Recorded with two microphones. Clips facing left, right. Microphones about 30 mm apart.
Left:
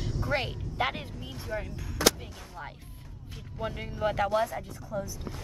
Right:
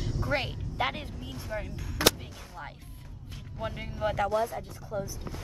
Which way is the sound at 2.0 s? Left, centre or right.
Right.